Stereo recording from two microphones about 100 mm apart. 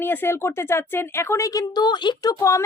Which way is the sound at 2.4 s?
30° left (ahead or behind).